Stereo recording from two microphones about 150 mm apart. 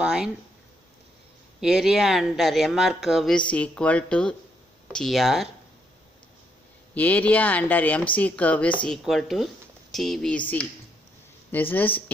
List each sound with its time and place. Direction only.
0.0 s speech: 5° right (ahead or behind)
1.6 s speech: centre (ahead or behind)
6.9 s speech: 10° left (ahead or behind)